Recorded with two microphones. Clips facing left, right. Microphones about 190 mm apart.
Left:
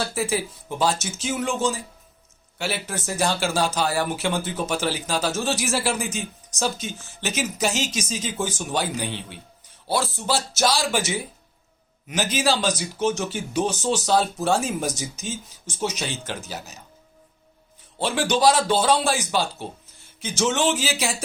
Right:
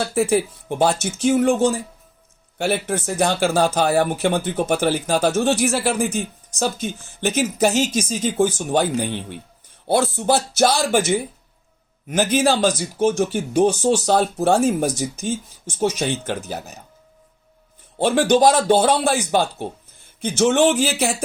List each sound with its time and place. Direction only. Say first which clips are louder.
0.0 s speech: right 7 dB; 55° right (ahead or behind)
17.9 s speech: right 7 dB; 50° right (ahead or behind)